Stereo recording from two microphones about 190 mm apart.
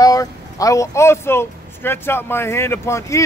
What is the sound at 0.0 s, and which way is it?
Speech, 20° left (ahead or behind).